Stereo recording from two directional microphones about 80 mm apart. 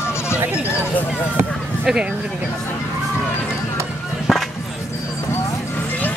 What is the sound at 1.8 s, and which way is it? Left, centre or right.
Speech, centre.